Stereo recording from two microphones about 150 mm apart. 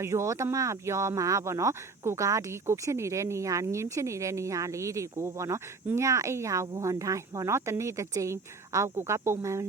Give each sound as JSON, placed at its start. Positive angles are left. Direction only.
{"t": 0.0, "sound": "speech", "side_deg": -20}